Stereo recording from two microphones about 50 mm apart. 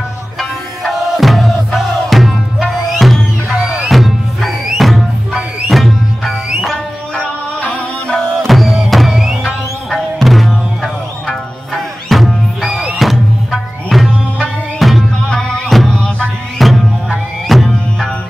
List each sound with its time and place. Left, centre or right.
0.4 s music: centre
3.4 s music: centre
3.9 s music: centre
7.2 s music: centre
8.5 s music: centre
15.1 s music: centre
16.5 s music: centre